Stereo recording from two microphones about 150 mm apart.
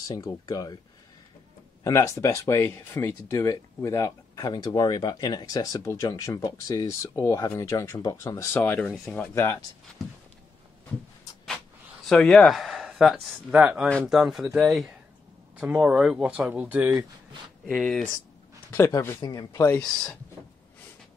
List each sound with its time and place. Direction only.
0.1 s speech: 25° left (ahead or behind)
1.8 s speech: 20° left (ahead or behind)
8.9 s speech: centre (ahead or behind)
9.2 s speech: 15° left (ahead or behind)
10.0 s speech: centre (ahead or behind)
12.1 s speech: 5° left (ahead or behind); by 16.9 s 10° right (ahead or behind)
17.6 s speech: 5° left (ahead or behind)
18.7 s speech: 20° left (ahead or behind)